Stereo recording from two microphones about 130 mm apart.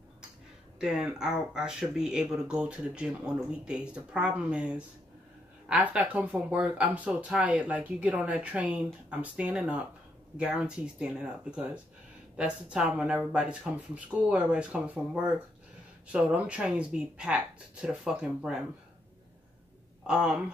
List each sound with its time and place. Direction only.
0.7 s speech: 5° right (ahead or behind)
20.1 s speech: 5° right (ahead or behind)